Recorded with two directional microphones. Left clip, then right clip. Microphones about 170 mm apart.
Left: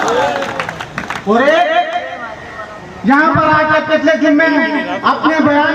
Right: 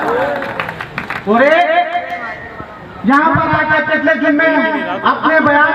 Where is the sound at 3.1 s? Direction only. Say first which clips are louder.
Left 1 dB; 25° right (ahead or behind).